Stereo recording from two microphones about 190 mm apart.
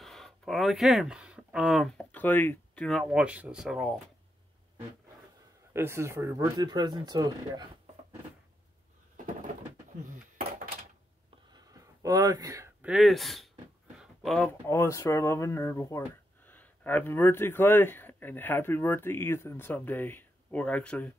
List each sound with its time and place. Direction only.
0.0 s speech: centre (ahead or behind)
5.7 s speech: 15° right (ahead or behind)
11.5 s a sound: 15° right (ahead or behind)
12.8 s speech: centre (ahead or behind)
13.9 s a sound: centre (ahead or behind)
14.7 s speech: 15° left (ahead or behind)